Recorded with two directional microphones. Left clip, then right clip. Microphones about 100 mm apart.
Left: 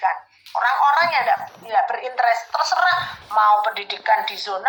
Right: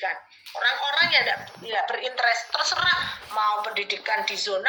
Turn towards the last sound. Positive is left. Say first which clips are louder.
# left 5 dB
turn(degrees=-35)  # may be behind; listen again after turning